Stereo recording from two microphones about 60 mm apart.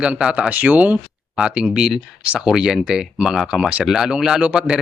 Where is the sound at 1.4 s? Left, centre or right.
Centre.